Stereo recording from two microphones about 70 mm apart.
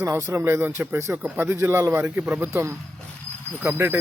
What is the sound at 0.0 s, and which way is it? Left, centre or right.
A man's voice, right.